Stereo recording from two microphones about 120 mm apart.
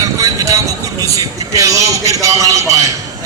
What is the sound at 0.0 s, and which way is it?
Vehicle, 30° right (ahead or behind).